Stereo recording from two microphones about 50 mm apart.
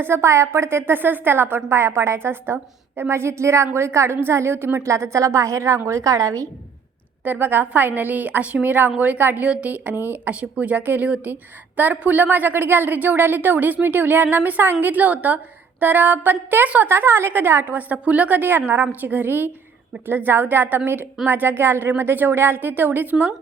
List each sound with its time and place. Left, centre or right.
0.0 s a woman's voice: right
1.7 s a woman's voice: right
3.1 s a woman's voice: right
4.9 s a woman's voice: right
7.3 s a woman's voice: right
17.7 s a woman's voice: right
18.3 s a woman's voice: right